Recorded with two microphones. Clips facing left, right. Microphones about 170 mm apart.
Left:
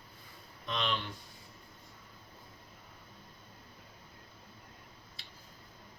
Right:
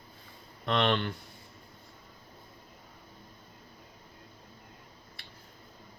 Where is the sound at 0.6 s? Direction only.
65° right (ahead or behind).